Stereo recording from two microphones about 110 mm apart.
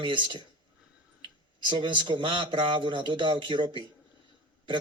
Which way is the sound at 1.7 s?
45° right (ahead or behind).